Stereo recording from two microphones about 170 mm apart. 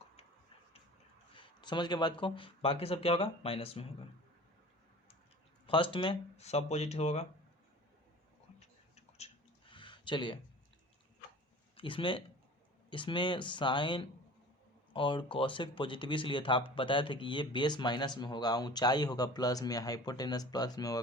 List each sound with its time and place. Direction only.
1.4 s speech: 25° left (ahead or behind)
5.6 s speech: 30° left (ahead or behind)
8.5 s a sound: 40° left (ahead or behind)
11.8 s speech: 30° left (ahead or behind)